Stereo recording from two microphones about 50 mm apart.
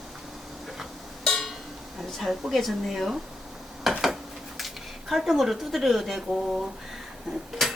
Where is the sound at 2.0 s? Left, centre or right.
Centre.